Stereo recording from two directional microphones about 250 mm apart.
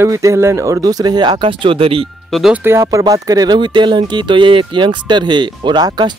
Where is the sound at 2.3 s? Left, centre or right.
Centre.